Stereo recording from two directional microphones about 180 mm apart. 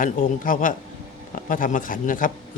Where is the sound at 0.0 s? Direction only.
50° left (ahead or behind).